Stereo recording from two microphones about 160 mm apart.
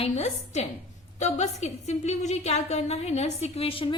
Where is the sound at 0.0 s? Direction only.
40° left (ahead or behind).